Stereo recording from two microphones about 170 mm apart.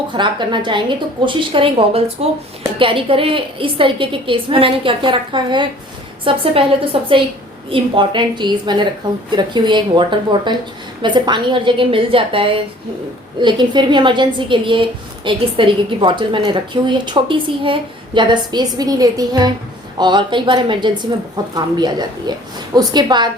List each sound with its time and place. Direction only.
0.1 s a woman's voice: 25° right (ahead or behind)